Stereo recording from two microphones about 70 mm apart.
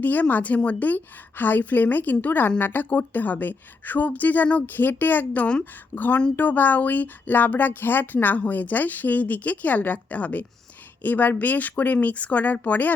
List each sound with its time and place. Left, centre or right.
0.0 s speech: left